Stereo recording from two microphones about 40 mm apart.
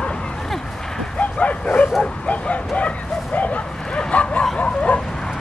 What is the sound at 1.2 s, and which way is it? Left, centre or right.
Bow-wow, left.